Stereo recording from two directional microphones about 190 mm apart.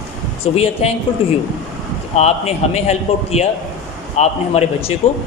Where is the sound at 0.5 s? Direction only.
30° left (ahead or behind).